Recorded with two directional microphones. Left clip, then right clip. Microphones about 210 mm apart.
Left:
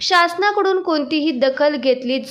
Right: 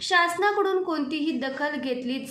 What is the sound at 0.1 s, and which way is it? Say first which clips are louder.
A woman's voice: left 6 dB; 40° left (ahead or behind).